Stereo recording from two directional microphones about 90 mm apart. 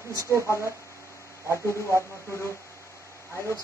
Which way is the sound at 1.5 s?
30° left (ahead or behind).